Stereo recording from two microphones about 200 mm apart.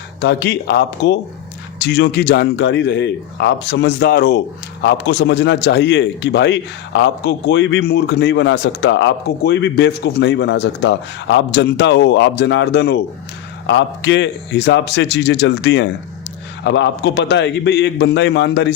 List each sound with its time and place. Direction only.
0.2 s a man's voice: 55° left (ahead or behind)